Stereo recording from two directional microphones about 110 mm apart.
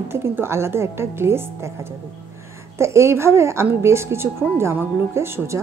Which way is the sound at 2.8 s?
25° right (ahead or behind).